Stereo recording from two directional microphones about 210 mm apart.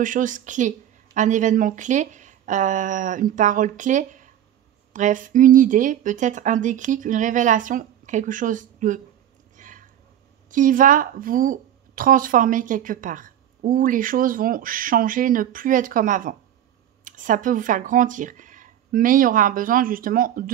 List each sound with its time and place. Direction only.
0.0 s a woman's voice: 40° right (ahead or behind)
9.6 s a sound: 35° right (ahead or behind)
10.5 s a woman's voice: 40° right (ahead or behind)